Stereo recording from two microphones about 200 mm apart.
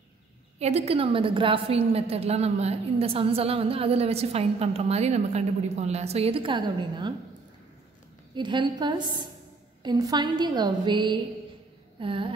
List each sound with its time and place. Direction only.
0.6 s a woman's voice: 30° right (ahead or behind)
8.4 s a woman's voice: 25° right (ahead or behind)